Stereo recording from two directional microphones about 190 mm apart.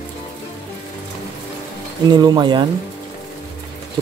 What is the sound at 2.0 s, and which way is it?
Speech, 20° right (ahead or behind).